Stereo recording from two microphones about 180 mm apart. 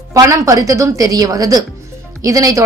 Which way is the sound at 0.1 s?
15° right (ahead or behind).